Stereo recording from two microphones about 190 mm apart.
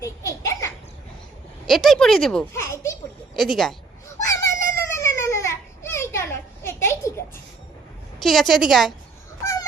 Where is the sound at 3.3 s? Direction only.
Centre (ahead or behind).